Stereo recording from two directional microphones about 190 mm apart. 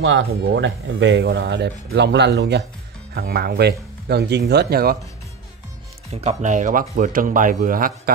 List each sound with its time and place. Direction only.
0.0 s speech: 70° right (ahead or behind); by 4.9 s 55° right (ahead or behind)
6.2 s speech: 40° right (ahead or behind)